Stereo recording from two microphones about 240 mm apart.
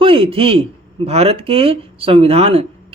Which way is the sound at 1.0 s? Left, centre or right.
Right.